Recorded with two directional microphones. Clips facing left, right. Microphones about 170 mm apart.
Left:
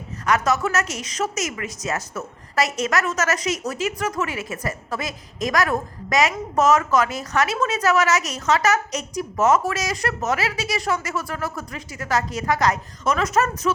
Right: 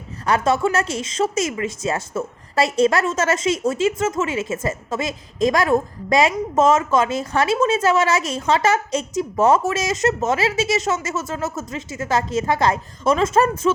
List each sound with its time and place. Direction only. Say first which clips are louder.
0.3 s speech: right 3 dB; 30° right (ahead or behind)